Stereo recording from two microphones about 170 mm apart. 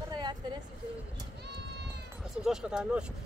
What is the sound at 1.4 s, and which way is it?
Run, 80° right.